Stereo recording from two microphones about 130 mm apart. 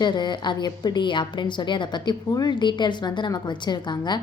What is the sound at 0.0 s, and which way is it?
A woman's voice, 35° left (ahead or behind).